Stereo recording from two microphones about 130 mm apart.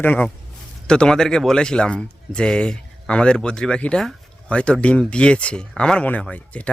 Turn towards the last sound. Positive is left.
turn(degrees=10)  # may be behind; listen again after turning